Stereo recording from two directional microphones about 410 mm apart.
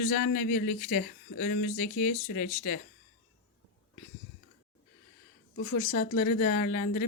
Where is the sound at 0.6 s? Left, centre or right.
Centre.